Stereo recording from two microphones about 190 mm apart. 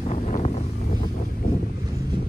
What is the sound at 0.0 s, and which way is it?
Vehicle, 40° left (ahead or behind).